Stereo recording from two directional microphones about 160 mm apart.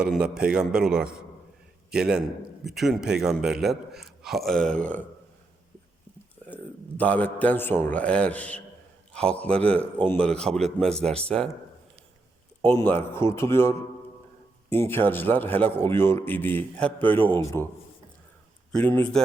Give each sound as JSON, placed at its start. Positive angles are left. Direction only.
{"t": 0.0, "sound": "a man's voice", "side_deg": -5}
{"t": 6.5, "sound": "a man's voice", "side_deg": 10}
{"t": 12.8, "sound": "a man's voice", "side_deg": 15}
{"t": 18.7, "sound": "a man's voice", "side_deg": 10}